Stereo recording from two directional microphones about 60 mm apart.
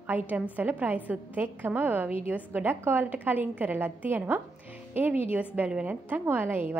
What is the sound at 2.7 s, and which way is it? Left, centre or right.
A woman's voice, right.